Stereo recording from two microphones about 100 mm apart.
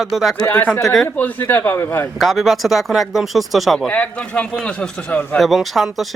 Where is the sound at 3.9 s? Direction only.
10° left (ahead or behind).